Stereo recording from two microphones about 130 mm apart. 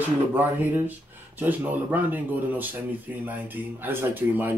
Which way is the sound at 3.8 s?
15° right (ahead or behind).